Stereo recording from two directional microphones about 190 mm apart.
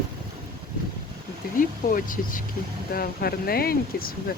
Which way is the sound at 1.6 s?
45° left (ahead or behind).